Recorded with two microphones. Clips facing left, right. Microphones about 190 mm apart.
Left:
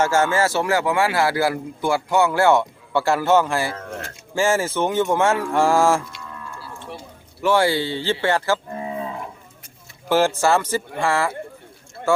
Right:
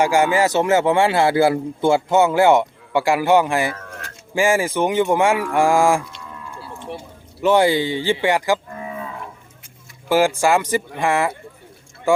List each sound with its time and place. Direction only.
0.0 s speech: 15° right (ahead or behind)
7.4 s speech: 20° right (ahead or behind)
8.7 s cattle: 25° left (ahead or behind)
10.1 s speech: 10° right (ahead or behind)